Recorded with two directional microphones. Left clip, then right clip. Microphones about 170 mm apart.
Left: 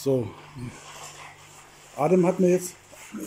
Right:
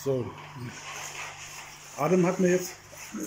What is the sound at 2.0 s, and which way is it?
Speech, 15° left (ahead or behind).